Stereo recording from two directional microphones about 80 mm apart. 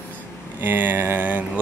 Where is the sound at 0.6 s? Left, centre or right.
Right.